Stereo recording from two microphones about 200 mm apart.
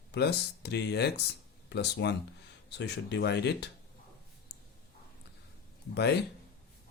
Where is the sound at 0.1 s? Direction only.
55° left (ahead or behind).